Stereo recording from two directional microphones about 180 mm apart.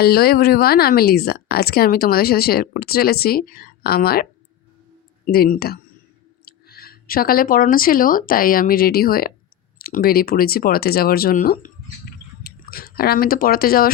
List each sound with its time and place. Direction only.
0.0 s speech: 60° left (ahead or behind)